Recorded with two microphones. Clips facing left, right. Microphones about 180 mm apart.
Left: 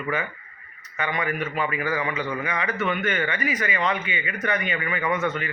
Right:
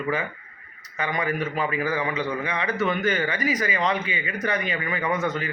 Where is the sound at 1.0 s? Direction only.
35° right (ahead or behind).